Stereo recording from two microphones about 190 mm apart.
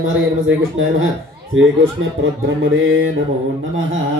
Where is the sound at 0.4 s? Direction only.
90° right.